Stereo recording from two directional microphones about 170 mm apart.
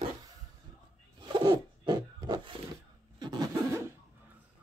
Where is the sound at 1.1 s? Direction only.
25° right (ahead or behind).